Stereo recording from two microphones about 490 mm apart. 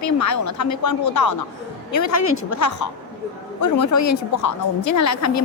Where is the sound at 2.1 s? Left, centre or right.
Left.